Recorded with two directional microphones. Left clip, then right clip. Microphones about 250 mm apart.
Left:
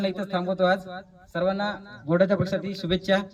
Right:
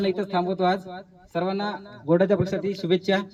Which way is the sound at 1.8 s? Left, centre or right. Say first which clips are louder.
Right 5 dB; left.